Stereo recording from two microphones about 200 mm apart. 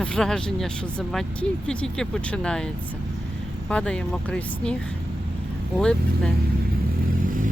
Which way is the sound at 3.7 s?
5° left (ahead or behind).